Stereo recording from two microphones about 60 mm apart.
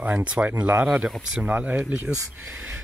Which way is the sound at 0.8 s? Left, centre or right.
Centre.